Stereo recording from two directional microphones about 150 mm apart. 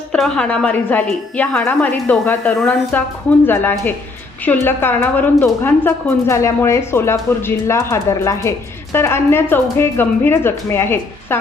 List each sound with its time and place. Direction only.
0.1 s a woman's voice: 5° left (ahead or behind)